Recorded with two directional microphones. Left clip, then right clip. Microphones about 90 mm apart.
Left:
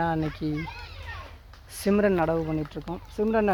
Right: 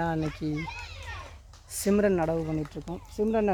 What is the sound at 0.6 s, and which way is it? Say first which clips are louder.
Children playing: even; 25° right (ahead or behind).